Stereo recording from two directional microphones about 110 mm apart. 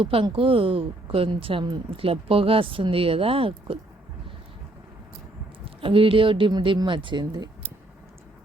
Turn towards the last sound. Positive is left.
turn(degrees=-45)  # may be behind; listen again after turning